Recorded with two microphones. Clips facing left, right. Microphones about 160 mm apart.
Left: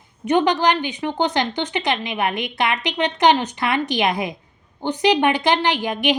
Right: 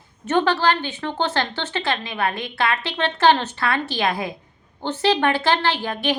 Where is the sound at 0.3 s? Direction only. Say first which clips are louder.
Left 2 dB; 15° left (ahead or behind).